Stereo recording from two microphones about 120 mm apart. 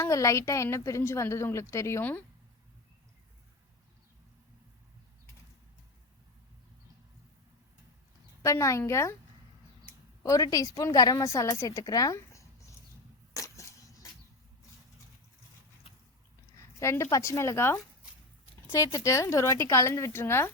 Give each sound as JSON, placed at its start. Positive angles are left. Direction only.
{"t": 0.0, "sound": "a woman's voice", "side_deg": 25}
{"t": 8.4, "sound": "a woman's voice", "side_deg": 25}
{"t": 10.2, "sound": "a woman's voice", "side_deg": 30}
{"t": 13.3, "sound": "a sound", "side_deg": 25}
{"t": 16.8, "sound": "a woman's voice", "side_deg": 25}